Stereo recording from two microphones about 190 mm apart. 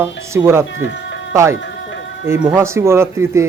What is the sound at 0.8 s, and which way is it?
Music, 70° left (ahead or behind).